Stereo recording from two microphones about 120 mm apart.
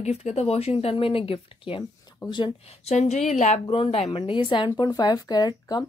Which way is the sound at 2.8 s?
65° left (ahead or behind).